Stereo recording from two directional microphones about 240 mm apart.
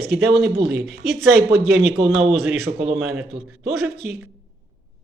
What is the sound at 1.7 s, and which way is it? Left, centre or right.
Speech, right.